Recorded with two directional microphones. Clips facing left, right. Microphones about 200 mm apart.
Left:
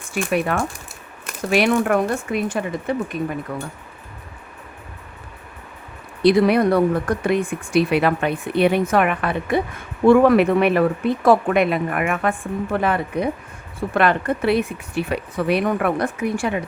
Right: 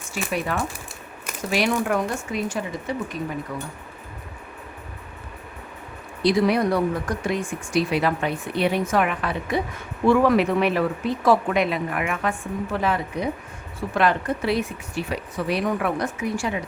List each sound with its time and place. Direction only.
0.5 s speech: 60° left (ahead or behind)
6.2 s speech: 60° left (ahead or behind)